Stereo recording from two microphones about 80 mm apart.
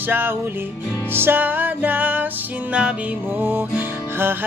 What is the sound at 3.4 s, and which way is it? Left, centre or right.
Music, right.